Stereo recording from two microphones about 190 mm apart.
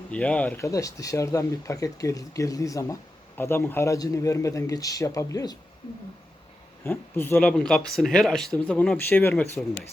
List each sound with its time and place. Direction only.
0.1 s speech: 5° left (ahead or behind)
6.8 s speech: 10° left (ahead or behind)